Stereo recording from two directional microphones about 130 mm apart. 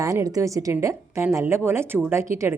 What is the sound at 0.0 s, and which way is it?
Speech, 25° right (ahead or behind).